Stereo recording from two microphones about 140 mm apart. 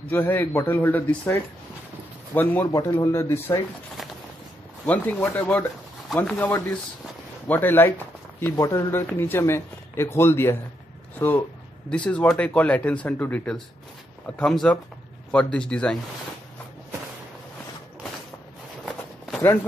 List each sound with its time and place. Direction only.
0.1 s a man's voice: 15° left (ahead or behind)
4.8 s speech: 10° left (ahead or behind)
18.9 s run: centre (ahead or behind)